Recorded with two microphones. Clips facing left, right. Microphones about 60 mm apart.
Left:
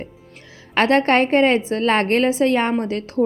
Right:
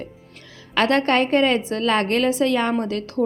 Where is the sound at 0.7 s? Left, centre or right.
Left.